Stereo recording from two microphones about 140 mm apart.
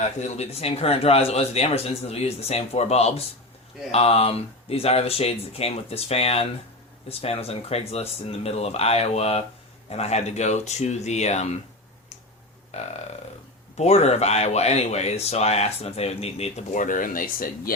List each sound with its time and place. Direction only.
0.0 s speech: 55° left (ahead or behind)
12.7 s speech: 50° left (ahead or behind); by 17.7 s 90° left